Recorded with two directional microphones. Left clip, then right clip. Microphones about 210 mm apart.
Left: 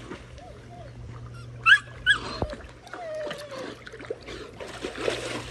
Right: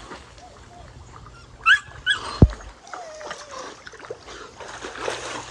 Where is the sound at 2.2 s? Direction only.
20° left (ahead or behind).